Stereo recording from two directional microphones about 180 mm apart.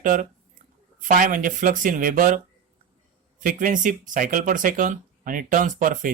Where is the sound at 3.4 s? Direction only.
50° right (ahead or behind).